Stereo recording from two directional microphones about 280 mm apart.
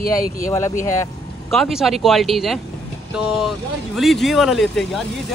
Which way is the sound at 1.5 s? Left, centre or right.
Centre.